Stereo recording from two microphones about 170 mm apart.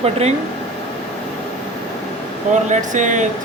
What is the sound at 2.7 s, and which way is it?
Speech, 45° right (ahead or behind).